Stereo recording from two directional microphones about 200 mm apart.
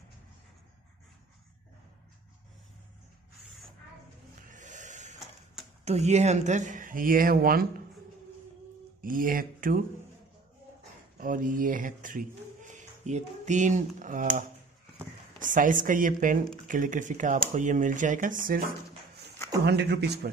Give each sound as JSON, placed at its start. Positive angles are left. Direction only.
{"t": 4.5, "sound": "vehicle", "side_deg": -40}
{"t": 5.9, "sound": "speech", "side_deg": -35}
{"t": 9.0, "sound": "speech", "side_deg": -45}
{"t": 11.1, "sound": "speech", "side_deg": -40}
{"t": 15.4, "sound": "speech", "side_deg": -40}
{"t": 19.6, "sound": "a man's voice", "side_deg": -55}